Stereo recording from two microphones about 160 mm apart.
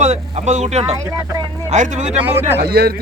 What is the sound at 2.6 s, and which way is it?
Speech, 75° right (ahead or behind).